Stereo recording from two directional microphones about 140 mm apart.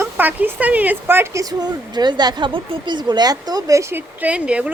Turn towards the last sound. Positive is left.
turn(degrees=-10)  # may be behind; listen again after turning